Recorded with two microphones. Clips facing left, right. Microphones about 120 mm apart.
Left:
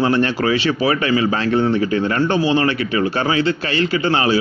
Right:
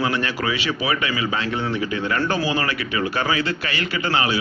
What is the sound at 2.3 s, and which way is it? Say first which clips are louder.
Speech: left 6 dB; 25° left (ahead or behind).